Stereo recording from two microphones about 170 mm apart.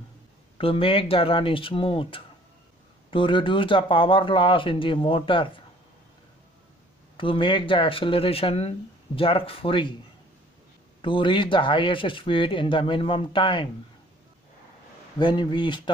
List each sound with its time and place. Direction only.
0.6 s speech: 35° left (ahead or behind)
7.2 s speech: 30° left (ahead or behind)
11.0 s speech: 30° left (ahead or behind)
15.1 s speech: 25° left (ahead or behind)